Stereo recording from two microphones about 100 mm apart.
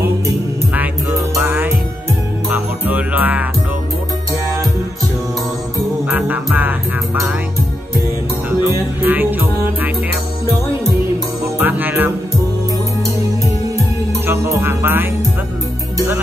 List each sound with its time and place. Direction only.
1.4 s music: 25° right (ahead or behind)
6.0 s music: 15° right (ahead or behind)
9.0 s music: 20° right (ahead or behind)
11.6 s music: 20° right (ahead or behind)
13.0 s music: 30° right (ahead or behind)